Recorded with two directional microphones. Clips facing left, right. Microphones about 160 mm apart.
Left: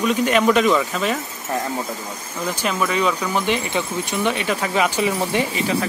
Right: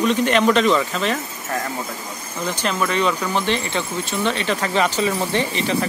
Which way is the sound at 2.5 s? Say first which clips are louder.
Even; 5° left (ahead or behind).